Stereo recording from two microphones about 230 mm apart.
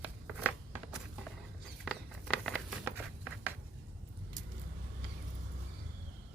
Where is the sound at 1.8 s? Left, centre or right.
Centre.